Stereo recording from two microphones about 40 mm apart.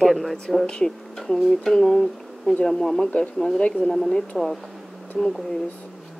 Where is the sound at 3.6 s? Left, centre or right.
Left.